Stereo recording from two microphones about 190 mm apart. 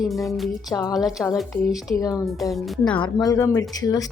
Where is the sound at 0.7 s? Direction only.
20° left (ahead or behind).